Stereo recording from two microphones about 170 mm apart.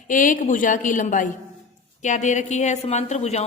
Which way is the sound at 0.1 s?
50° left (ahead or behind).